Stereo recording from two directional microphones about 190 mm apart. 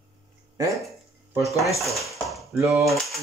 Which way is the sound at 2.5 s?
15° right (ahead or behind).